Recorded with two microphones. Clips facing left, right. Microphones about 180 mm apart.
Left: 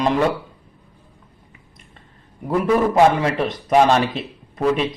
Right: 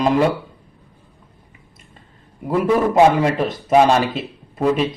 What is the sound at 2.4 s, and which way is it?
A man's voice, 5° right (ahead or behind).